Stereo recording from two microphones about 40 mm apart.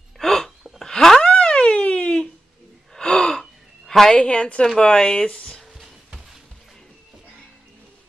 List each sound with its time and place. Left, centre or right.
0.2 s gasp: centre
1.2 s a sound: left
2.9 s gasp: left
3.3 s gasp: centre
4.1 s speech: left